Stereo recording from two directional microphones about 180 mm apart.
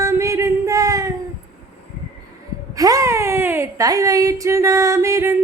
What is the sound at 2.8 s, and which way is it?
A woman's voice, 20° right (ahead or behind).